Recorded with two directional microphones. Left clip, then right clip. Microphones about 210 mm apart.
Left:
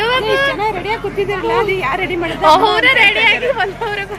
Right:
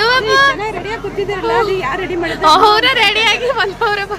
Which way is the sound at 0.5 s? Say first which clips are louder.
Left 3 dB; 25° left (ahead or behind).